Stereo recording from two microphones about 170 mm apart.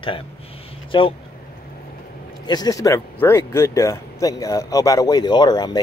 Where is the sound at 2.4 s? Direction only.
25° left (ahead or behind).